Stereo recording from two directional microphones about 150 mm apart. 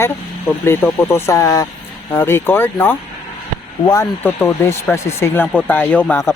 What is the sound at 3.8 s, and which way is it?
Speech, 25° left (ahead or behind).